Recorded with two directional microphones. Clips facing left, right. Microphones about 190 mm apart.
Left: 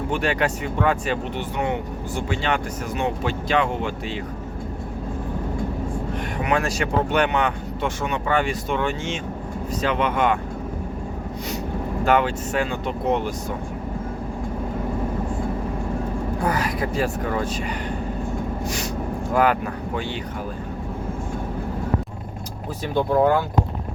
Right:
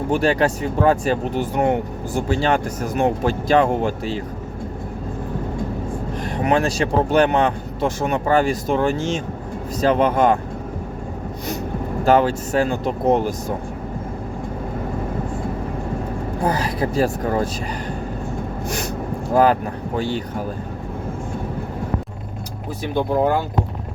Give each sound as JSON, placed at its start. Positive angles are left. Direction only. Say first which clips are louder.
{"t": 0.1, "sound": "speech", "louder": "right 6 dB", "side_deg": -35}
{"t": 6.3, "sound": "speech", "louder": "right 5 dB", "side_deg": -30}
{"t": 12.0, "sound": "speech", "louder": "right 4 dB", "side_deg": -35}
{"t": 16.4, "sound": "speech", "louder": "right 4 dB", "side_deg": -30}
{"t": 19.3, "sound": "speech", "louder": "right 4 dB", "side_deg": -35}